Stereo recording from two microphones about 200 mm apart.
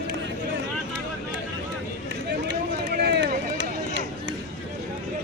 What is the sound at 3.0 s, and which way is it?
Run, 55° right (ahead or behind).